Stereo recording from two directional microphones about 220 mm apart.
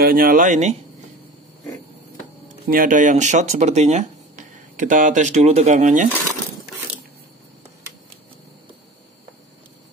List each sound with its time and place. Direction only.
0.0 s speech: 40° right (ahead or behind)
2.7 s speech: 40° right (ahead or behind)